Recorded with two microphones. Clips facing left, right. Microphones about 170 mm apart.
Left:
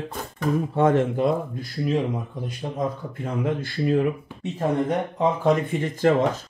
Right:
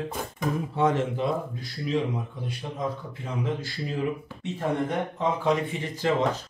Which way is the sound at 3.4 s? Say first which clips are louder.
Left 10 dB; 60° left (ahead or behind).